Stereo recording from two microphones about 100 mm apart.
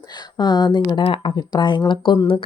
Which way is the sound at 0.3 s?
45° left (ahead or behind).